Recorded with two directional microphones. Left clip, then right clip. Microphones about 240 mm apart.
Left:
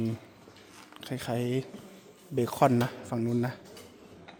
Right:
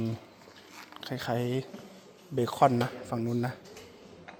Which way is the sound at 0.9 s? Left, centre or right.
Centre.